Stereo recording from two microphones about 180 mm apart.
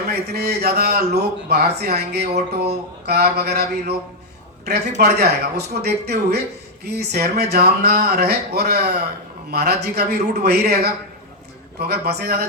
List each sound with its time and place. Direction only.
0.1 s a man's voice: 65° right (ahead or behind)